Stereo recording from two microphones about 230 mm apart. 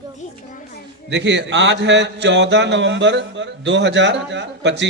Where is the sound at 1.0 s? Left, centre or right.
Right.